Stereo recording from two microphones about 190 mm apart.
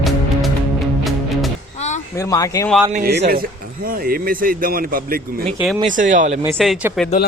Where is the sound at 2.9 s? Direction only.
55° right (ahead or behind).